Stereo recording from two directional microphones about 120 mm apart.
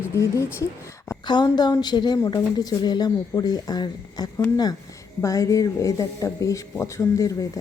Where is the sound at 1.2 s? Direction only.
40° left (ahead or behind).